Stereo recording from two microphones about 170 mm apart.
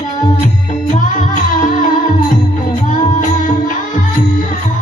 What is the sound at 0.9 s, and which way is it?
Music, 50° left (ahead or behind).